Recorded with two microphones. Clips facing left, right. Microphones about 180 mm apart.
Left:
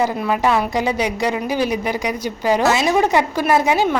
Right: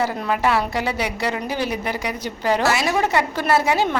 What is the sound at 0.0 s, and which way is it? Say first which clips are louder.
A woman's voice: left 3 dB; 15° left (ahead or behind).